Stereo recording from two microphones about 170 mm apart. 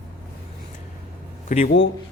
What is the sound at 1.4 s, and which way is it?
Speech, 50° left (ahead or behind).